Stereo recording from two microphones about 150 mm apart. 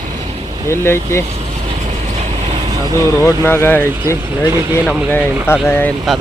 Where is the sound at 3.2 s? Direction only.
15° left (ahead or behind).